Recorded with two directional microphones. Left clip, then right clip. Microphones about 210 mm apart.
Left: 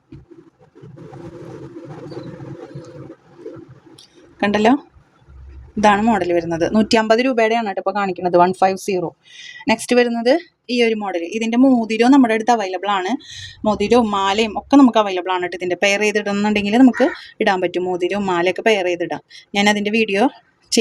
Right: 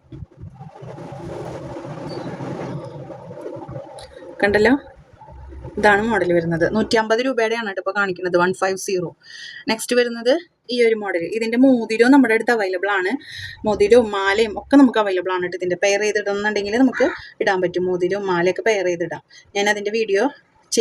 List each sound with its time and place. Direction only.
4.4 s a woman's voice: 30° left (ahead or behind)
5.8 s speech: 25° left (ahead or behind)